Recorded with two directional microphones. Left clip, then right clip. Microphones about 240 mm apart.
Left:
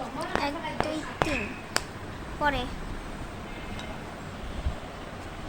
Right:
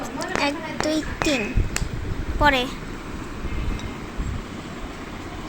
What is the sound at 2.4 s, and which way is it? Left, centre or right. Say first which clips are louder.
Speech: right 9 dB; centre.